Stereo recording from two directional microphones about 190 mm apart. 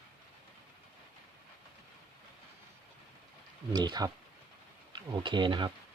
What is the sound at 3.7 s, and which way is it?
Speech, 20° right (ahead or behind).